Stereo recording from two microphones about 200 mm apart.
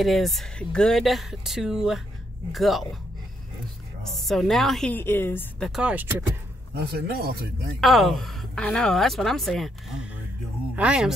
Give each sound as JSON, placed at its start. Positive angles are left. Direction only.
{"t": 0.0, "sound": "a woman's voice", "side_deg": 0}
{"t": 4.2, "sound": "a woman's voice", "side_deg": 0}
{"t": 5.7, "sound": "a woman's voice", "side_deg": -5}
{"t": 6.7, "sound": "speech", "side_deg": -50}
{"t": 7.8, "sound": "a woman's voice", "side_deg": 0}